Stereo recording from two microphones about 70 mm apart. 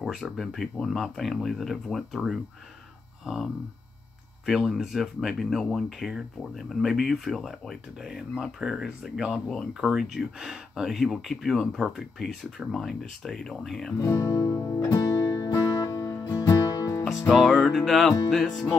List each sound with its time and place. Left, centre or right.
0.0 s speech: centre
4.5 s speech: centre
14.0 s speech: left
14.5 s music: left
16.0 s music: left
16.3 s music: left
17.3 s speech: centre